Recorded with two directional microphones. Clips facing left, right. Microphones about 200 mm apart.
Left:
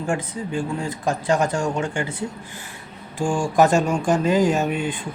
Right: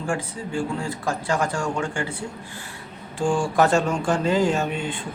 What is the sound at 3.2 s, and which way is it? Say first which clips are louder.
Speech: left 2 dB; 15° left (ahead or behind).